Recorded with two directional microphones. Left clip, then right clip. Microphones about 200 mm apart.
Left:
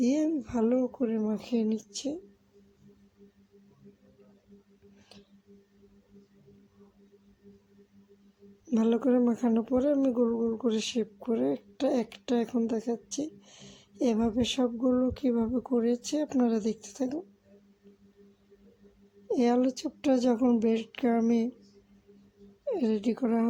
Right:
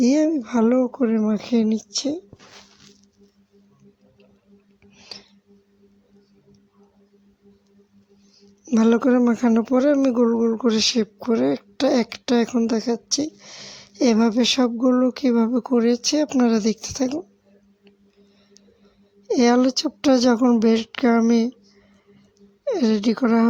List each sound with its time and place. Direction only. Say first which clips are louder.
0.0 s speech: right 9 dB; 20° right (ahead or behind)
8.6 s speech: right 9 dB; 15° right (ahead or behind)
10.8 s speech: right 11 dB; 15° right (ahead or behind)
19.3 s speech: right 9 dB; 15° right (ahead or behind)
22.6 s speech: right 8 dB; 20° right (ahead or behind)